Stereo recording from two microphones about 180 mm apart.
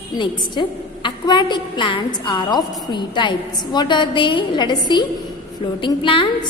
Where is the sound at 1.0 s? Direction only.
25° left (ahead or behind).